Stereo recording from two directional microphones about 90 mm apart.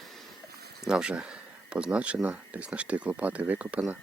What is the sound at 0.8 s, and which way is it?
Speech, 10° right (ahead or behind).